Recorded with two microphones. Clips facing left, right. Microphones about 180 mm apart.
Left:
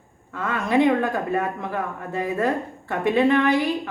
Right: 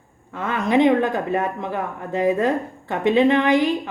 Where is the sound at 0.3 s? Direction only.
20° right (ahead or behind).